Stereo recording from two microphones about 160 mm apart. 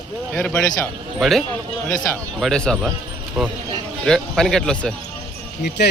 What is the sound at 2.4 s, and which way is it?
Speech, 5° left (ahead or behind).